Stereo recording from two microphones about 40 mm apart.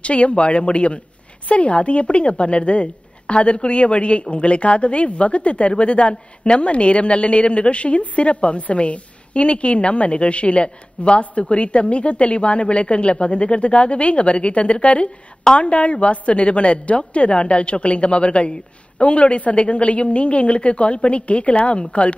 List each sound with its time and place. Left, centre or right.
0.0 s a woman's voice: left